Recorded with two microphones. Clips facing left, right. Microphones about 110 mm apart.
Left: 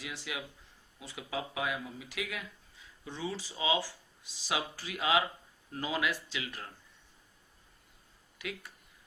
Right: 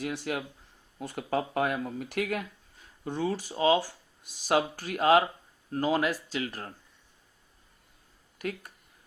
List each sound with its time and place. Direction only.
0.0 s speech: 50° right (ahead or behind)
8.4 s speech: 45° right (ahead or behind)